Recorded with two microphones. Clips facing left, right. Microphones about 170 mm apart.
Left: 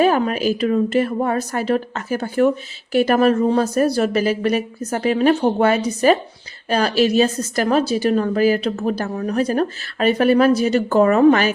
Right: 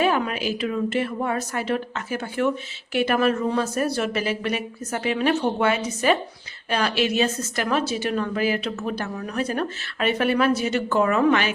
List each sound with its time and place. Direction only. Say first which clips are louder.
0.0 s a woman's voice: left 6 dB; 40° left (ahead or behind)